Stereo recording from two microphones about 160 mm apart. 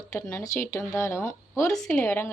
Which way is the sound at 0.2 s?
10° left (ahead or behind).